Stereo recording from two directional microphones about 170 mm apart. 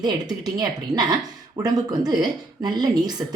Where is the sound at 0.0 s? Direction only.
25° right (ahead or behind).